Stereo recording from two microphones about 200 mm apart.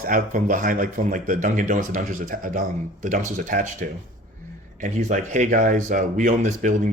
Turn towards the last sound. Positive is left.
turn(degrees=-40)  # may be behind; listen again after turning